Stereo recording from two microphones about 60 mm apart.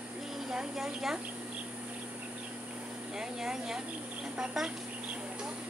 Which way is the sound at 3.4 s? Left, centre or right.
Centre.